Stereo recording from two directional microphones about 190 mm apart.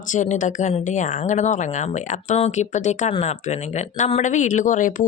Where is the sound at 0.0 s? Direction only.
40° left (ahead or behind).